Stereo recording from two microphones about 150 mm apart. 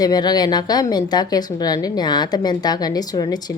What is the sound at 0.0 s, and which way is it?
Speech, 25° left (ahead or behind).